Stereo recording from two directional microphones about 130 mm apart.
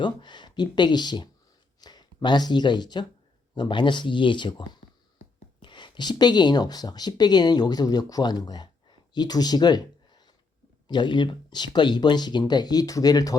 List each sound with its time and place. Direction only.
0.0 s speech: 35° left (ahead or behind)